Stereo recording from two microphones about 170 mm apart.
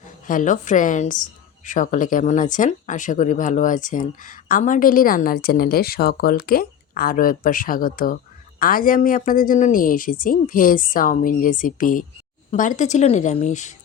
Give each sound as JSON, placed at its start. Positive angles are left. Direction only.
{"t": 0.3, "sound": "speech", "side_deg": 50}